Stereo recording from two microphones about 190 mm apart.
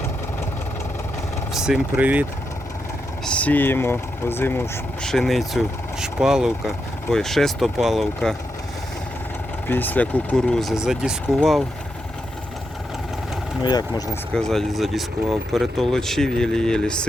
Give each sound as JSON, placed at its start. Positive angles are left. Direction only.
{"t": 1.5, "sound": "speech", "side_deg": -5}
{"t": 3.2, "sound": "speech", "side_deg": 5}
{"t": 9.6, "sound": "speech", "side_deg": 10}
{"t": 13.6, "sound": "speech", "side_deg": 20}
{"t": 14.3, "sound": "speech", "side_deg": 0}